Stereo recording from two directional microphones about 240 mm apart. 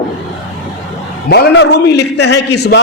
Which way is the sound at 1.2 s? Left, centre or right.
Left.